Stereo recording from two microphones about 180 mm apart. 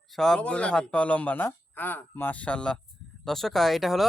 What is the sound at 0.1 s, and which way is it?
Speech, centre (ahead or behind).